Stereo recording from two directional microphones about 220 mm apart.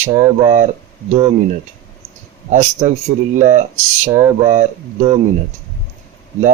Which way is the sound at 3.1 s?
25° right (ahead or behind).